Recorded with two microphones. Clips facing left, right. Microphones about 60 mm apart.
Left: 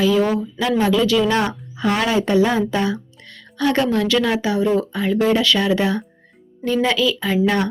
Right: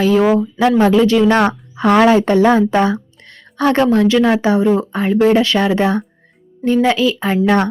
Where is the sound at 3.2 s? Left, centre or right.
Right.